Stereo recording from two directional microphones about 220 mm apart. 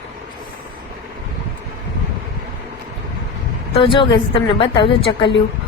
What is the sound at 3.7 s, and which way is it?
A woman's voice, 25° left (ahead or behind).